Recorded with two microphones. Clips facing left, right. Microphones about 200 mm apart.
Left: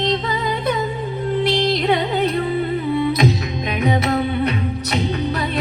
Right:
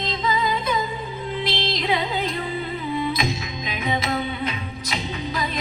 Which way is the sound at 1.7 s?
70° left (ahead or behind).